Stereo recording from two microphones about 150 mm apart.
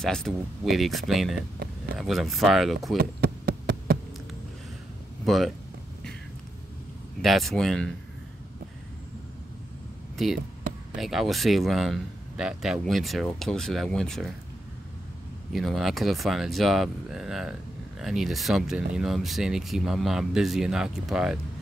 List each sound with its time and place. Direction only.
0.0 s speech: 5° left (ahead or behind)
3.0 s a sound: 90° right
5.2 s speech: centre (ahead or behind)
7.2 s speech: centre (ahead or behind)
10.1 s speech: centre (ahead or behind)
15.5 s speech: centre (ahead or behind)